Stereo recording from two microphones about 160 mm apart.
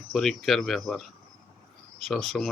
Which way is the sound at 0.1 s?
Centre (ahead or behind).